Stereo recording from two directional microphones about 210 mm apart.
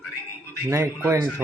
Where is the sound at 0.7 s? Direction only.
15° right (ahead or behind).